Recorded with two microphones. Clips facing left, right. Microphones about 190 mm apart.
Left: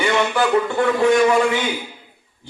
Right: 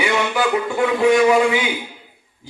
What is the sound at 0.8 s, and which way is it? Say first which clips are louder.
Speech: right 2 dB; 10° right (ahead or behind).